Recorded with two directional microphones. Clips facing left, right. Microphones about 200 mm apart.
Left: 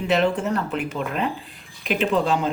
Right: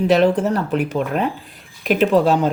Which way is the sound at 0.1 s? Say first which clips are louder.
Right 3 dB; 40° right (ahead or behind).